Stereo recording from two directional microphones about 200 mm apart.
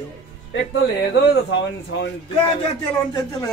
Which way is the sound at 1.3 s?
55° left (ahead or behind).